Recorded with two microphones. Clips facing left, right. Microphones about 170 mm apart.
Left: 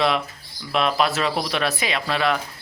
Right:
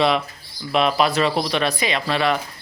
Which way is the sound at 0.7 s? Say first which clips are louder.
Right 2 dB; centre (ahead or behind).